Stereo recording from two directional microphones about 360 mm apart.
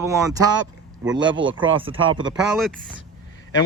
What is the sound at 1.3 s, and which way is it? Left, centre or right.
Speech, right.